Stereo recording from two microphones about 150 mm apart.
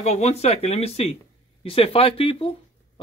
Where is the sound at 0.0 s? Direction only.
45° left (ahead or behind).